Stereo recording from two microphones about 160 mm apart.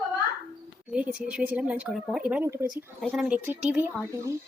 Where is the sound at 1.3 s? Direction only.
10° right (ahead or behind).